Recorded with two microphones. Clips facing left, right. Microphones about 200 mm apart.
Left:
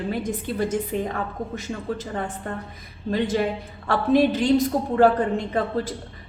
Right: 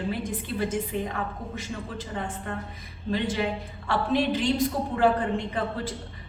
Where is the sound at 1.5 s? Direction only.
45° left (ahead or behind).